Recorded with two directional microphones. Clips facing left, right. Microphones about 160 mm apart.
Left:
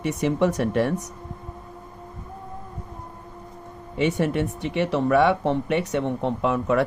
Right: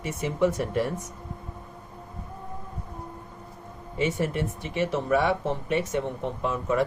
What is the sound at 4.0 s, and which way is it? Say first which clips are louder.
Speech: left 4 dB; 70° left (ahead or behind).